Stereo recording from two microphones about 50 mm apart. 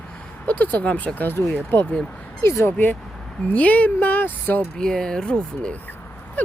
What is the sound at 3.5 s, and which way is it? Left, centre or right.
Speech, left.